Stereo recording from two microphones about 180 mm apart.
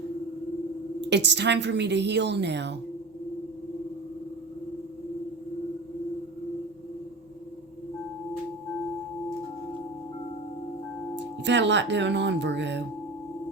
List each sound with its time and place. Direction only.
1.1 s a woman's voice: 75° right (ahead or behind)
11.4 s a woman's voice: 80° right